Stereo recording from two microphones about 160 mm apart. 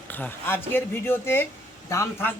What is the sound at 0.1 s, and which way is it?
Speech, 10° left (ahead or behind).